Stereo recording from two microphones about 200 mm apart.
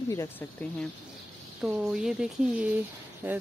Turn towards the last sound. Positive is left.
turn(degrees=-10)  # may be behind; listen again after turning